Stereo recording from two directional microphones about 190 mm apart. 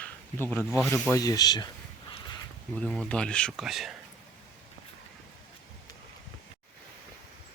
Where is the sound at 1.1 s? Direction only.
20° left (ahead or behind).